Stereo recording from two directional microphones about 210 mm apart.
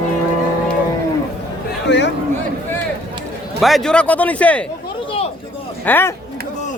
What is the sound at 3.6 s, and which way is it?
Speech, centre (ahead or behind).